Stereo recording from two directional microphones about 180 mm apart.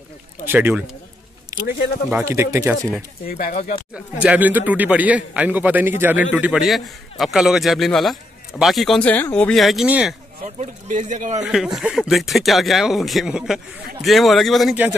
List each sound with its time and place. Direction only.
0.5 s a man's voice: 10° right (ahead or behind)
3.3 s speech: 55° left (ahead or behind)
3.9 s a man's voice: 5° right (ahead or behind)
10.4 s speech: 45° right (ahead or behind)
11.4 s a man's voice: centre (ahead or behind)